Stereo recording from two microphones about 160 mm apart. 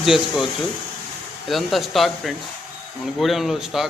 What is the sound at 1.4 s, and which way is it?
A man's voice, centre (ahead or behind).